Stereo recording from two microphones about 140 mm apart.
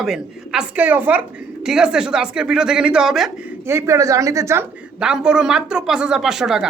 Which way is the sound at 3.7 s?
20° right (ahead or behind).